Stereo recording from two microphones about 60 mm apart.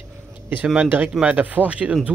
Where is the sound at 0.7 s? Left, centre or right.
Right.